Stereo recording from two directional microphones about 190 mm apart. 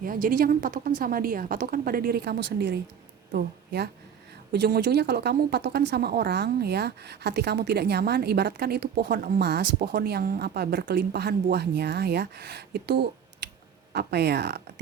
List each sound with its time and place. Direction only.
0.0 s a woman's voice: 50° right (ahead or behind)